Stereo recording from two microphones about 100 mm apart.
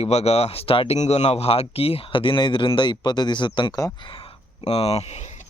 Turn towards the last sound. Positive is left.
turn(degrees=90)